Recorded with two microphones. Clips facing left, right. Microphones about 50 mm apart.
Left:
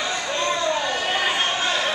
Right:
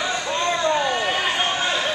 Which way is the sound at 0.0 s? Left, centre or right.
Centre.